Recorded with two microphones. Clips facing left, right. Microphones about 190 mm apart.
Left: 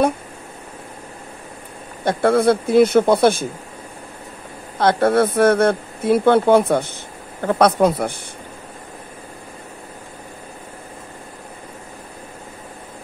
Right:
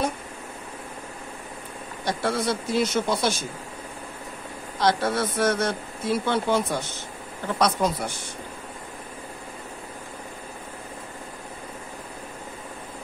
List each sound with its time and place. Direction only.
2.0 s speech: 55° left (ahead or behind)
4.7 s speech: 55° left (ahead or behind)